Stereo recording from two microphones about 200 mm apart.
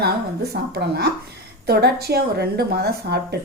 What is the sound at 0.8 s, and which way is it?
A woman's voice, 55° right (ahead or behind).